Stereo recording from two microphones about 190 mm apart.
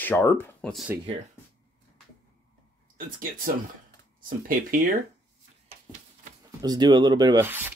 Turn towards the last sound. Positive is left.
turn(degrees=-10)  # may be behind; listen again after turning